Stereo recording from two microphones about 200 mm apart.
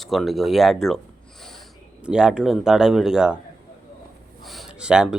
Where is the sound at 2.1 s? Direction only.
5° right (ahead or behind).